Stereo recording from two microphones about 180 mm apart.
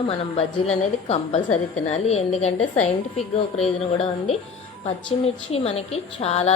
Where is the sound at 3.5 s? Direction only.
35° left (ahead or behind).